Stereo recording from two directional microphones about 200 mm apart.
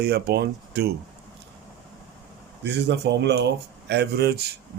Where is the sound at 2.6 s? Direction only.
60° right (ahead or behind).